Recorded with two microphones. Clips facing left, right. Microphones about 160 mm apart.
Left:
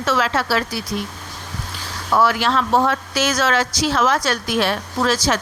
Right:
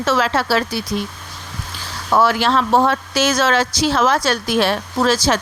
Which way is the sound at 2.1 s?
30° right (ahead or behind).